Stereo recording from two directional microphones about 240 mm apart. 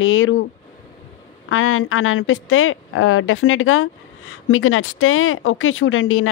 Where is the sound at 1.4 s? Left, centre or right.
Left.